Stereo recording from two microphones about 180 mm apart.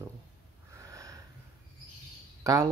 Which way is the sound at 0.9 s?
15° right (ahead or behind).